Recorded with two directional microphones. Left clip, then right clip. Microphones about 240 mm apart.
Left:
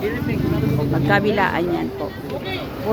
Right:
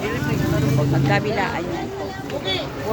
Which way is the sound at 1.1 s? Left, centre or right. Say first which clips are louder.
Left 6 dB; left.